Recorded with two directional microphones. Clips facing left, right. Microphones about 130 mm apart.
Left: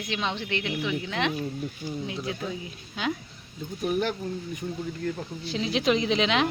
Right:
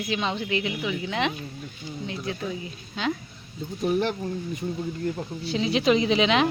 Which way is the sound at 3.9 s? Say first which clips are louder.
Right 2 dB; 30° right (ahead or behind).